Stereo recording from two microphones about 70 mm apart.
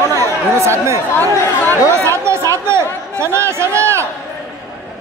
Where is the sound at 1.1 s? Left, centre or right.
Left.